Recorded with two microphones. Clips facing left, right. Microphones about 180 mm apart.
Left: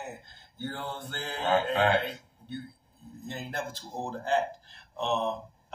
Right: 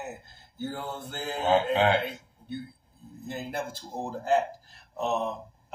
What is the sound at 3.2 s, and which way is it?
Speech, 10° right (ahead or behind).